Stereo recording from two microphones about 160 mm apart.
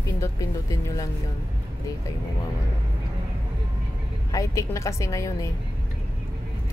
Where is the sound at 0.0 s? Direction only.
20° left (ahead or behind).